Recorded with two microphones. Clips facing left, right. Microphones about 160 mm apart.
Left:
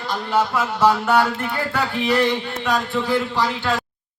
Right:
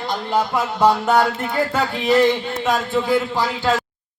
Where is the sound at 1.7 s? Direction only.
20° right (ahead or behind).